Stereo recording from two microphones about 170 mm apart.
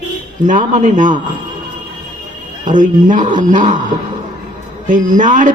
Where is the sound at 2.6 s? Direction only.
50° right (ahead or behind).